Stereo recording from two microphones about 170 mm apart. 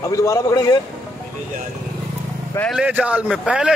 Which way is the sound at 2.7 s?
5° right (ahead or behind).